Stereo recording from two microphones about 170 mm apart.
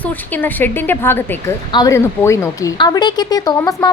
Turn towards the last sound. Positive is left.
turn(degrees=20)  # may be behind; listen again after turning